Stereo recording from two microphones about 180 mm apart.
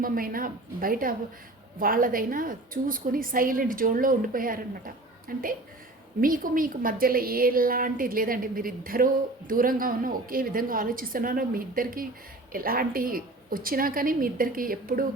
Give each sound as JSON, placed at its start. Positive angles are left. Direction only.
{"t": 0.0, "sound": "a woman's voice", "side_deg": -50}